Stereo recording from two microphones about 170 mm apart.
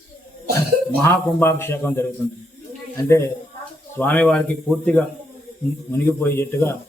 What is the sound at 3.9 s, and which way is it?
A man's voice, 10° left (ahead or behind).